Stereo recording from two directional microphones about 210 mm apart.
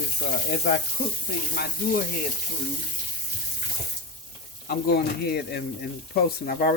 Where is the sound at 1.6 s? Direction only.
45° left (ahead or behind).